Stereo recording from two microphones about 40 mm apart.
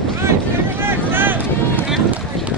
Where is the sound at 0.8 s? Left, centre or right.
Right.